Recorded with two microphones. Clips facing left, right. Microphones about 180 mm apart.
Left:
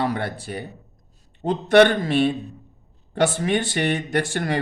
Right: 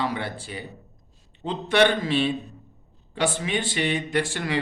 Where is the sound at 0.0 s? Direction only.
50° left (ahead or behind).